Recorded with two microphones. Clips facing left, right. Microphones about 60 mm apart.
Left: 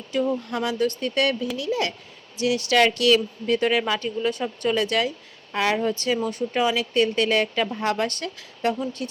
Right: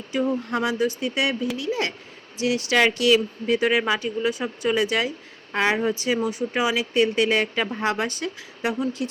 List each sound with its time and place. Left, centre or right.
0.1 s speech: centre
0.3 s a woman's voice: right
0.9 s a woman's voice: centre
8.8 s speech: centre